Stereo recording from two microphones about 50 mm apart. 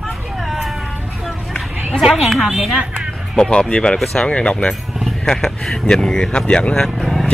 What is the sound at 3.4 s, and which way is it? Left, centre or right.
Speech, centre.